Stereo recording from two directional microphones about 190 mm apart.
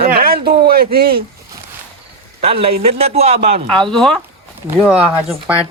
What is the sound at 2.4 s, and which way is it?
A man's voice, 30° right (ahead or behind).